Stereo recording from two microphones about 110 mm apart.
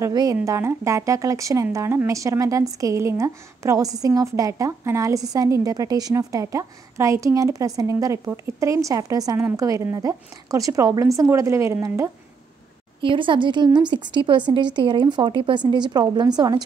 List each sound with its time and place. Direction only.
0.1 s a woman's voice: 35° right (ahead or behind)
13.0 s a woman's voice: 50° right (ahead or behind)